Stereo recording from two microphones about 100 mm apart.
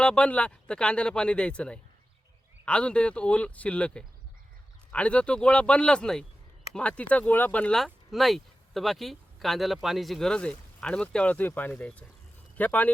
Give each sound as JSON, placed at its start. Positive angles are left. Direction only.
{"t": 0.0, "sound": "speech", "side_deg": 10}
{"t": 7.8, "sound": "speech", "side_deg": 0}